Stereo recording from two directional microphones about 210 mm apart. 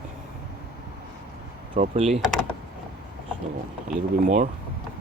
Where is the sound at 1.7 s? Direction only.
35° right (ahead or behind).